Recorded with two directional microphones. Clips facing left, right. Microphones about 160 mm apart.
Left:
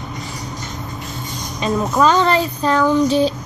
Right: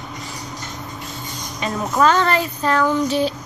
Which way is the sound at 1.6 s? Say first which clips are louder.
Left 2 dB; 15° left (ahead or behind).